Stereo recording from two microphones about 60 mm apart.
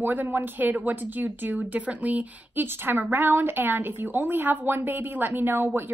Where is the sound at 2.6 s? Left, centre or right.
Right.